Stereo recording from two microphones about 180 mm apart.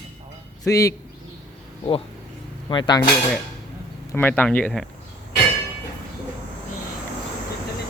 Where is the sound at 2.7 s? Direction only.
25° left (ahead or behind).